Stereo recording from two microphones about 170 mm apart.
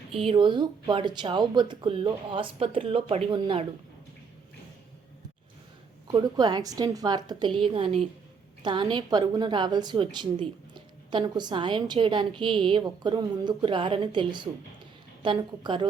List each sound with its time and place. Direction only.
0.1 s a woman's voice: 30° right (ahead or behind)
6.1 s a woman's voice: 25° right (ahead or behind)